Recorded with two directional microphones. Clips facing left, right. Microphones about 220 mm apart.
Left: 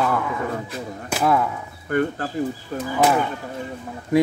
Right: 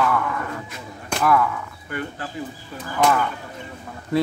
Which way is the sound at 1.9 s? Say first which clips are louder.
Left 9 dB; 45° left (ahead or behind).